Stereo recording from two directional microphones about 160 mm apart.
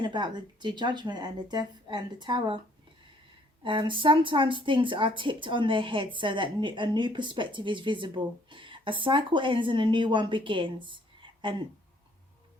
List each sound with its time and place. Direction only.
0.0 s speech: 30° right (ahead or behind)
3.6 s a woman's voice: 30° right (ahead or behind)